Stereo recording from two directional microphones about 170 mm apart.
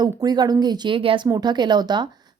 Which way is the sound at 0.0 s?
25° right (ahead or behind).